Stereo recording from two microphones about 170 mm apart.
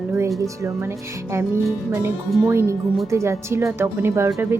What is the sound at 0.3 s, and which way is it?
Speech, 20° right (ahead or behind).